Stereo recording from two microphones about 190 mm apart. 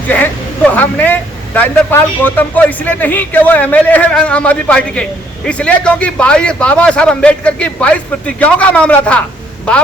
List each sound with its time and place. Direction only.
0.1 s speech: 10° left (ahead or behind)